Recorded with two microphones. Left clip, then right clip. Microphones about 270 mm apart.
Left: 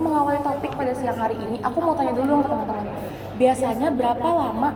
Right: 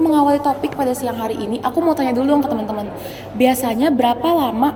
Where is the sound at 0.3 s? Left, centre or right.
Right.